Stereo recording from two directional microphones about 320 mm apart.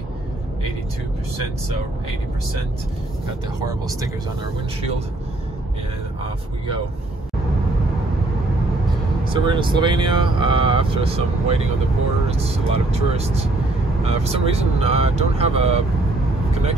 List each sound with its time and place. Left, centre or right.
3.6 s speech: centre
9.3 s speech: centre